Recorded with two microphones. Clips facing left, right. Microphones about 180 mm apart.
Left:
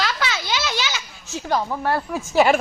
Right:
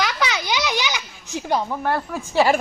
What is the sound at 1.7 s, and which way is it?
Speech, 5° left (ahead or behind).